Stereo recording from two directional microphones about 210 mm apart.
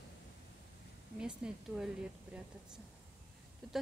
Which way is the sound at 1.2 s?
5° right (ahead or behind).